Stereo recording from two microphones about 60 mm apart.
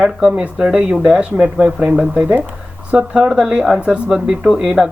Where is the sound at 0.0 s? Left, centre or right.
Centre.